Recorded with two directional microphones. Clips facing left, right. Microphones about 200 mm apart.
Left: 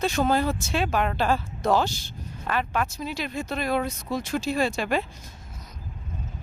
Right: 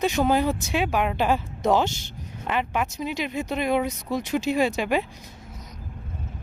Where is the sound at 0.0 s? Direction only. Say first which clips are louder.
Right 2 dB; 15° right (ahead or behind).